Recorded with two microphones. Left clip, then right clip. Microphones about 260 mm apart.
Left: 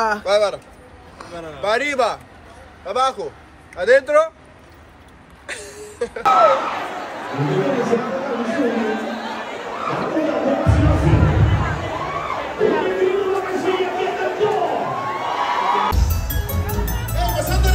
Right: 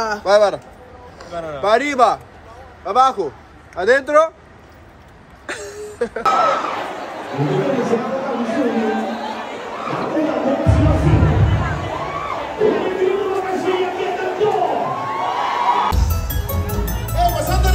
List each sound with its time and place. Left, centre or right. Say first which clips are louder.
0.2 s speech: right 4 dB; right
1.6 s speech: right 4 dB; right
5.5 s a sound: right 3 dB; right
6.9 s chatter: even; centre